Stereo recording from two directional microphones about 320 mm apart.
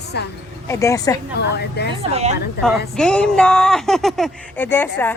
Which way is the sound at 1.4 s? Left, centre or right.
Left.